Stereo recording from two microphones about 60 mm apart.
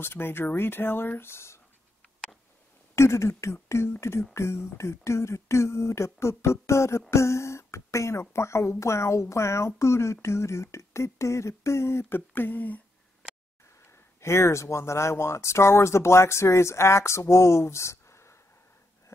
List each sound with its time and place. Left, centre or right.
0.0 s speech: left
3.0 s speech: left
14.2 s speech: left